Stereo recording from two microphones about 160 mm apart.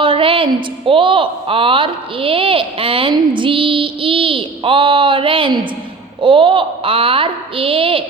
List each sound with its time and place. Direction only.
0.0 s a woman's voice: 35° right (ahead or behind)